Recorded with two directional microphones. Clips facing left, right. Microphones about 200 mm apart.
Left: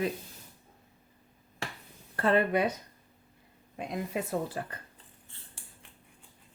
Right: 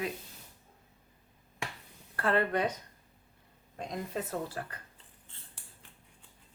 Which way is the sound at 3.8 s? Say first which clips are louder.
Left 3 dB; 10° left (ahead or behind).